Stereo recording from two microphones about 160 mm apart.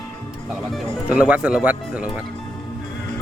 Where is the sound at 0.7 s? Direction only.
5° right (ahead or behind).